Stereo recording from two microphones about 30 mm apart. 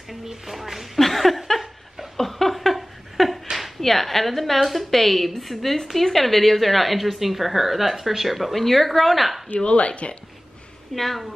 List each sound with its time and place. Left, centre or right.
0.1 s speech: centre
0.6 s a sound: centre
0.9 s a sound: centre
3.5 s speech: centre
9.6 s speech: left
11.0 s speech: centre